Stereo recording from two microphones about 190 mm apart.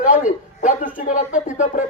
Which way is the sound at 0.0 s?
40° left (ahead or behind).